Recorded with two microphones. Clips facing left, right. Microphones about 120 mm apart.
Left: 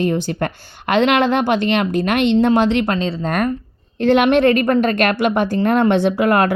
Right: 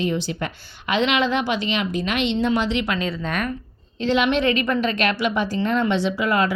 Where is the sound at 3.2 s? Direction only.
45° left (ahead or behind).